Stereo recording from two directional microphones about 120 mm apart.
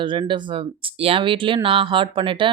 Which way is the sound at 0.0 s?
45° right (ahead or behind).